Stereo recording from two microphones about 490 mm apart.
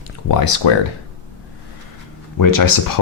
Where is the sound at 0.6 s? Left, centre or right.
Left.